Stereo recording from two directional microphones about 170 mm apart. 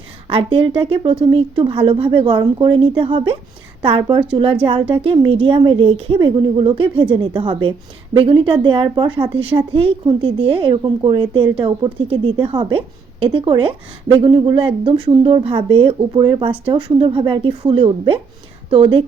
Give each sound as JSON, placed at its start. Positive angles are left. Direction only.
{"t": 0.3, "sound": "a woman's voice", "side_deg": -30}